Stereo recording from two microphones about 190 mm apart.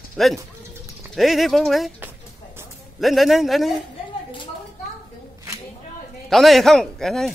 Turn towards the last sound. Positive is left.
turn(degrees=0)  # may be behind; listen again after turning